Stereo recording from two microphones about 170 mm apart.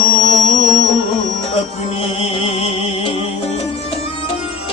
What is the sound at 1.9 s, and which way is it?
Music, 35° left (ahead or behind).